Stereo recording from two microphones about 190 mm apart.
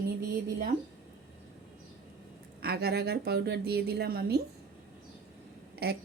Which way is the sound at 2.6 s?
60° right (ahead or behind).